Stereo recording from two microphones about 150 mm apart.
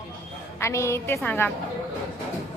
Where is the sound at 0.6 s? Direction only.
20° left (ahead or behind).